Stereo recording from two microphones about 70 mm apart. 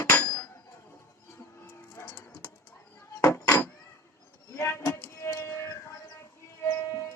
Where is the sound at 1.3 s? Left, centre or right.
Left.